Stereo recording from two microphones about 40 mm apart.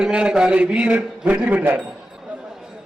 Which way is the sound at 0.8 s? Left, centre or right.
Right.